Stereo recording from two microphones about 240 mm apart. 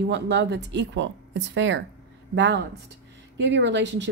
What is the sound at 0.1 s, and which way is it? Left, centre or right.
A woman's voice, right.